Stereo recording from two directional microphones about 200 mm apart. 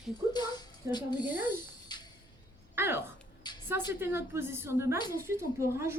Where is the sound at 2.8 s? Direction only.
10° right (ahead or behind).